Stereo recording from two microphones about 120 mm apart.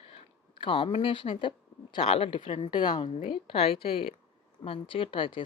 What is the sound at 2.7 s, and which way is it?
Speech, 40° left (ahead or behind).